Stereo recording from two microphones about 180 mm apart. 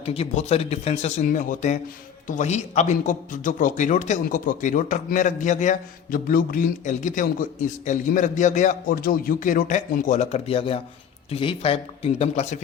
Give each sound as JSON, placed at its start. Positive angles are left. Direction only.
{"t": 0.0, "sound": "a man's voice", "side_deg": 35}